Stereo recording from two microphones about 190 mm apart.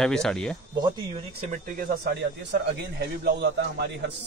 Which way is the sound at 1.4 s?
40° right (ahead or behind).